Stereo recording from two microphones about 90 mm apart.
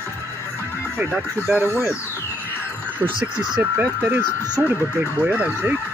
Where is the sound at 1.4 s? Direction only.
15° right (ahead or behind).